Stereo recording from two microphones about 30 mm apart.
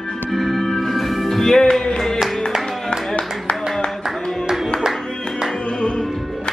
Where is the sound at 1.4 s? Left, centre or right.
Centre.